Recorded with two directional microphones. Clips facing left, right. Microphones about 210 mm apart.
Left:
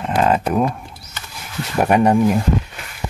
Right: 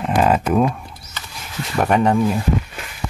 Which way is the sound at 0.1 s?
5° right (ahead or behind).